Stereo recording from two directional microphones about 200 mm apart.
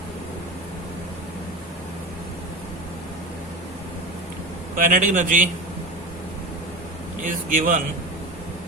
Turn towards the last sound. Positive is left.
turn(degrees=-40)  # may be behind; listen again after turning